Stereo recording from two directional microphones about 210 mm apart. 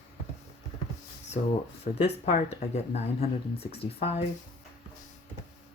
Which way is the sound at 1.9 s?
35° left (ahead or behind).